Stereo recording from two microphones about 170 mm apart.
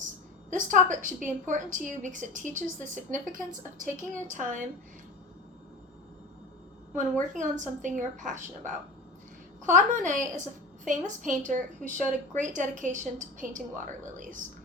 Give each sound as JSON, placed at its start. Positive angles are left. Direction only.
{"t": 0.5, "sound": "a woman's voice", "side_deg": -50}
{"t": 7.3, "sound": "a woman's voice", "side_deg": -45}